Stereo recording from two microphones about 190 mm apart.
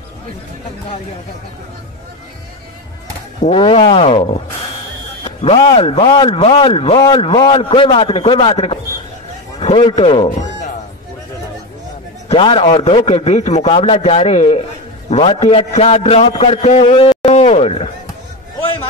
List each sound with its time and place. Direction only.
3.4 s a man's voice: 30° left (ahead or behind)
12.3 s a man's voice: 30° left (ahead or behind)